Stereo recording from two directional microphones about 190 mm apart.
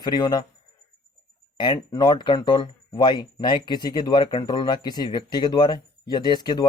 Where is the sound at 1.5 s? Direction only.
25° left (ahead or behind).